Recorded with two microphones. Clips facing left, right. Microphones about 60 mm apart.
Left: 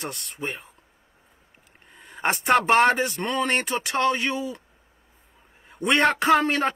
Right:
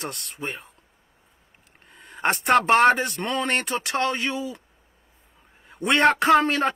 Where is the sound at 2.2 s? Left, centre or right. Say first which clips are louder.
Right 1 dB; centre.